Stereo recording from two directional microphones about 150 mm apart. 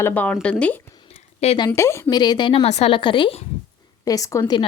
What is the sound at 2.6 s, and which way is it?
Speech, 45° left (ahead or behind).